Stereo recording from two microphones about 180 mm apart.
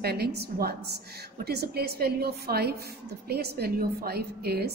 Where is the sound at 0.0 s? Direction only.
65° right (ahead or behind).